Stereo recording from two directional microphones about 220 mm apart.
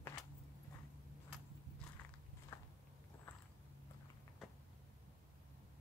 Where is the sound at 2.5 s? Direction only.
10° left (ahead or behind).